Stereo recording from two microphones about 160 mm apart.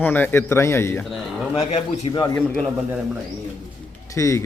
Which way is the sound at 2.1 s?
30° left (ahead or behind).